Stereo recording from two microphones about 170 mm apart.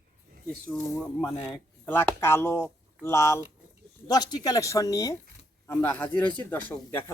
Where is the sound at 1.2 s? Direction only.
35° left (ahead or behind).